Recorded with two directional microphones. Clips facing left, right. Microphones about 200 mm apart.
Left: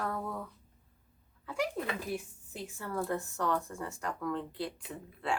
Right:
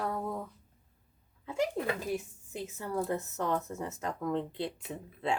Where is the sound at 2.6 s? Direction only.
15° right (ahead or behind).